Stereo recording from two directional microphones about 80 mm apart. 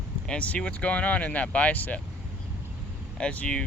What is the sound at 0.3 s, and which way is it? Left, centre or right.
Speech, centre.